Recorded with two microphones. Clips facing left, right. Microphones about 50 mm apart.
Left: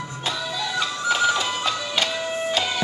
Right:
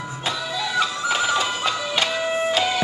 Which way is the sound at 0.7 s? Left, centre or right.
Centre.